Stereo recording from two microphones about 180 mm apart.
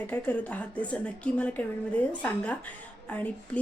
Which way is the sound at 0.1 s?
10° left (ahead or behind).